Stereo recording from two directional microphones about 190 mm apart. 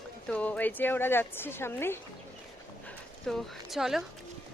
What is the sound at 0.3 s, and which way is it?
A woman's voice, 5° left (ahead or behind).